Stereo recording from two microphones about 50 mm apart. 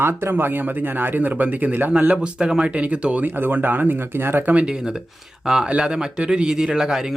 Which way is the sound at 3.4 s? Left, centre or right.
Right.